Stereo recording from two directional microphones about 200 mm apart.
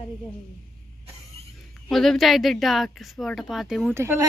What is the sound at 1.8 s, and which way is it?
Speech, centre (ahead or behind).